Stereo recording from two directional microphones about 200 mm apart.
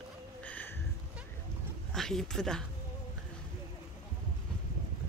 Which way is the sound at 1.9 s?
Centre (ahead or behind).